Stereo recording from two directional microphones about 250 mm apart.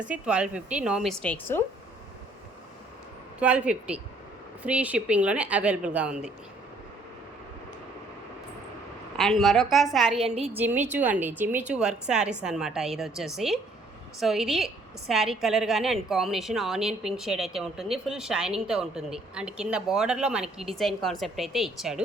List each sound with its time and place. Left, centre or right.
0.1 s a woman's voice: centre
3.4 s a woman's voice: centre
9.1 s a woman's voice: centre
10.3 s a woman's voice: right
10.6 s a woman's voice: centre